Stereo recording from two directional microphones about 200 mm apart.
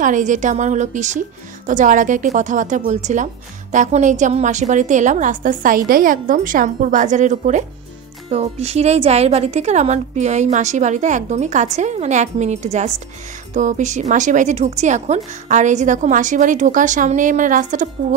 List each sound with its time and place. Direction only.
0.0 s speech: 40° right (ahead or behind)